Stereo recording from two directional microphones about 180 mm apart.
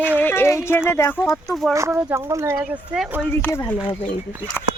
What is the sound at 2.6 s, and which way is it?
Speech, centre (ahead or behind).